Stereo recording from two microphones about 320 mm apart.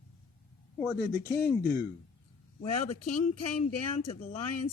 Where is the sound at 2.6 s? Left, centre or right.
Left.